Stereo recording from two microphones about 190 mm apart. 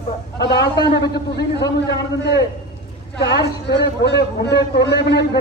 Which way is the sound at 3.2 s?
65° left (ahead or behind).